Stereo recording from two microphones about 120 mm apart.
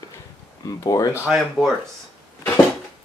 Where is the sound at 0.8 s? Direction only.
30° left (ahead or behind).